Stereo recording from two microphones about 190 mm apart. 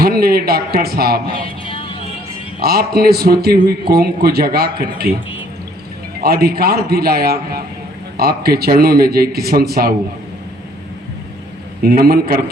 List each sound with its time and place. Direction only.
0.0 s a man's voice: 55° right (ahead or behind)
1.6 s music: 30° left (ahead or behind)
2.6 s a man's voice: 55° right (ahead or behind)
6.2 s a man's voice: 55° right (ahead or behind)
11.8 s a man's voice: 50° right (ahead or behind)